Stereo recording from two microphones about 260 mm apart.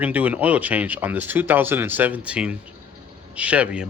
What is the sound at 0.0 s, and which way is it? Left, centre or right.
Speech, centre.